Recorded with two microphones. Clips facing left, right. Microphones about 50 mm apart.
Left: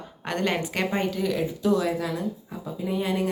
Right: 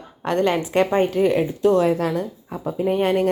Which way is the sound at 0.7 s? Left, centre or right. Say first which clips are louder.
Right 8 dB; right.